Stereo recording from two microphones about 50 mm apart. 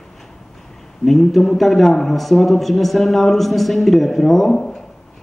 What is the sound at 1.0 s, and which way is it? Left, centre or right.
A man's voice, centre.